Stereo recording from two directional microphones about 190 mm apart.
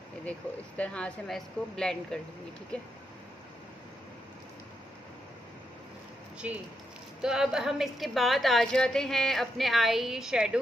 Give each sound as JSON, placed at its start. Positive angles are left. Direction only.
{"t": 0.2, "sound": "a woman's voice", "side_deg": 5}
{"t": 6.4, "sound": "a woman's voice", "side_deg": -5}